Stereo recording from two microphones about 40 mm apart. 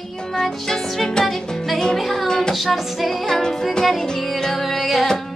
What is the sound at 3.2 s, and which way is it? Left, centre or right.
Music, centre.